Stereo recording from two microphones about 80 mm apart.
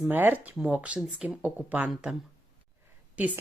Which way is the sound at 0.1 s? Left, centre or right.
Right.